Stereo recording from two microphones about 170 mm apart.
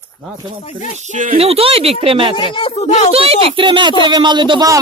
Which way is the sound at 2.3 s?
30° left (ahead or behind).